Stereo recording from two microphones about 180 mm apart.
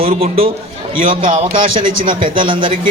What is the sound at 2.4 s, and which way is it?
Speech, 30° right (ahead or behind).